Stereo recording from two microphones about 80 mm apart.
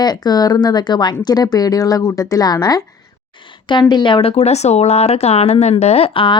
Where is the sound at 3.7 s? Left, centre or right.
Left.